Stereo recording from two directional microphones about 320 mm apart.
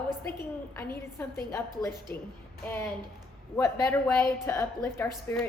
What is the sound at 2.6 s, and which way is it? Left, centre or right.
A woman's voice, centre.